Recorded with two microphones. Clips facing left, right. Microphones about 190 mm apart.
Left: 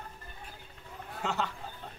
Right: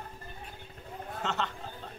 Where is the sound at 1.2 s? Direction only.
5° left (ahead or behind).